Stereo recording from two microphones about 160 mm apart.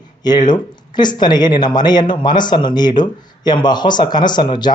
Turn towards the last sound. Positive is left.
turn(degrees=30)  # may be behind; listen again after turning